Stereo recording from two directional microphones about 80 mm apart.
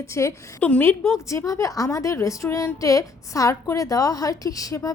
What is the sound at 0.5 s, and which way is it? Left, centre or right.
Speech, centre.